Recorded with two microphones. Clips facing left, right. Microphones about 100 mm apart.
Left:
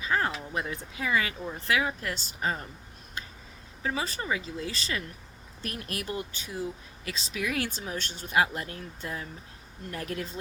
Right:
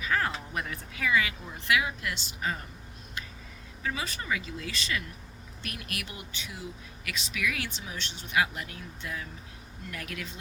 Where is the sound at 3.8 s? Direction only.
35° left (ahead or behind).